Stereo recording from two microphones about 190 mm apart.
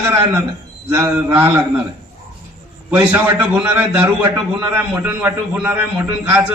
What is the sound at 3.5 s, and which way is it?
A man's voice, 5° right (ahead or behind).